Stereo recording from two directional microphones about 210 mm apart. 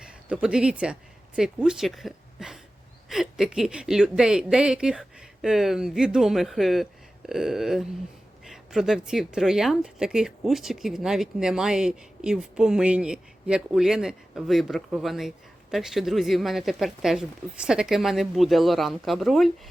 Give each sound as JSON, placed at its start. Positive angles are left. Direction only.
{"t": 0.0, "sound": "a woman's voice", "side_deg": -5}